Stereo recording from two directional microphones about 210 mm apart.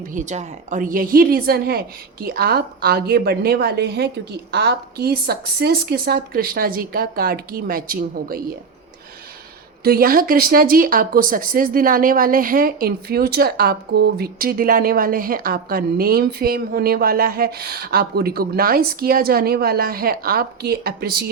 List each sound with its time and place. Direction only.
0.1 s a woman's voice: 35° right (ahead or behind)
9.8 s speech: 45° right (ahead or behind)